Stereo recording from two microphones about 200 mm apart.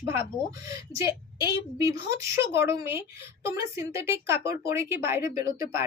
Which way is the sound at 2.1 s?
15° right (ahead or behind).